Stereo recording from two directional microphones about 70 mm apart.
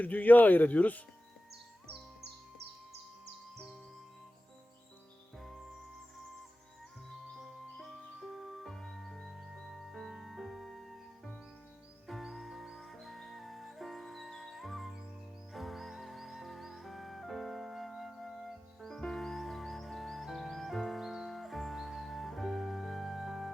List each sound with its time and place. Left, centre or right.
0.0 s speech: left
5.4 s music: centre
7.1 s music: centre
12.0 s music: centre